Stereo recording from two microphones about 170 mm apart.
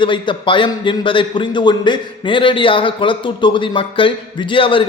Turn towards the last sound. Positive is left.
turn(degrees=30)  # may be behind; listen again after turning